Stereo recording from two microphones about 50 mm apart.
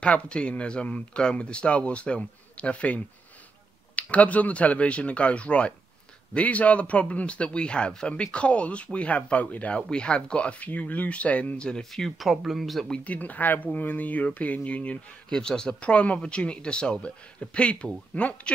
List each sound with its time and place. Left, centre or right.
0.0 s speech: left
11.5 s speech: centre
11.8 s speech: centre
13.0 s speech: left
15.2 s speech: centre